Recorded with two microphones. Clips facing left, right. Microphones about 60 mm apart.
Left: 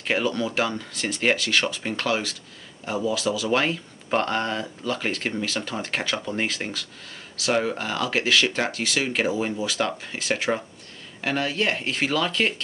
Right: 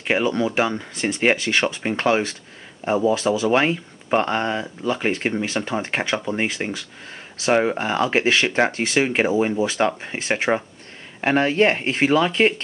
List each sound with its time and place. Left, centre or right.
0.0 s speech: right